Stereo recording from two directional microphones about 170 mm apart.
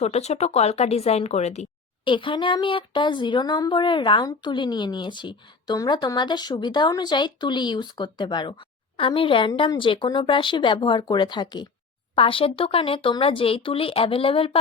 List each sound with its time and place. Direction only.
0.0 s speech: 40° left (ahead or behind)
2.0 s speech: 30° left (ahead or behind)